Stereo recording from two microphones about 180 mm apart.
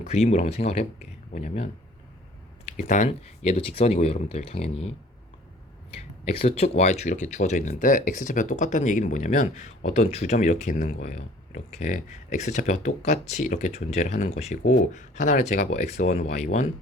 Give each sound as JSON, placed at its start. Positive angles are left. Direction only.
{"t": 0.0, "sound": "speech", "side_deg": 40}
{"t": 2.7, "sound": "speech", "side_deg": 45}
{"t": 6.2, "sound": "speech", "side_deg": 35}